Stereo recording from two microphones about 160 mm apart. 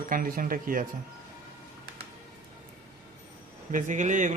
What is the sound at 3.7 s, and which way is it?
Speech, 50° right (ahead or behind).